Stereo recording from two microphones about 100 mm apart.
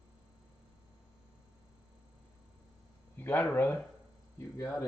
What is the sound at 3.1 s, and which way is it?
Speech, 20° left (ahead or behind).